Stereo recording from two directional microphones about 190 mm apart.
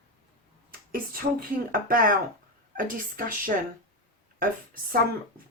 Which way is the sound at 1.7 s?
45° right (ahead or behind).